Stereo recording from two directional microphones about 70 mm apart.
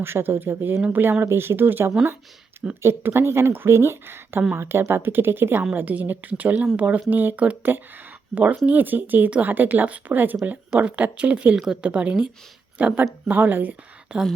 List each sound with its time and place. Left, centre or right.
0.0 s a woman's voice: right